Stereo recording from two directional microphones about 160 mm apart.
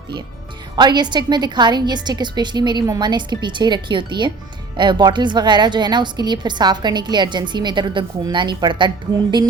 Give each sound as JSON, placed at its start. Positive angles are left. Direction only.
{"t": 0.8, "sound": "a woman's voice", "side_deg": -25}